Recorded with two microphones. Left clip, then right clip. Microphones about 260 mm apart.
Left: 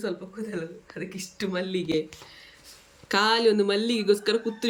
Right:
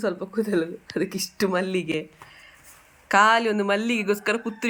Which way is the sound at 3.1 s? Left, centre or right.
Centre.